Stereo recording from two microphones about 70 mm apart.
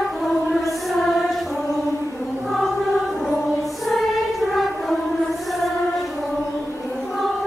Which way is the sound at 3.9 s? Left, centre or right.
Centre.